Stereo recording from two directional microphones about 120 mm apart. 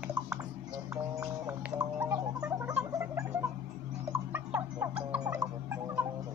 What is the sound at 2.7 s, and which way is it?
Frog, 10° right (ahead or behind).